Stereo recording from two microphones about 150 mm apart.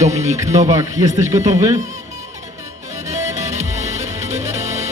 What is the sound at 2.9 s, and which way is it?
Music, 50° right (ahead or behind).